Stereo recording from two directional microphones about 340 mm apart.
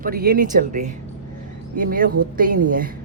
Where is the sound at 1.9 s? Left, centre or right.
Right.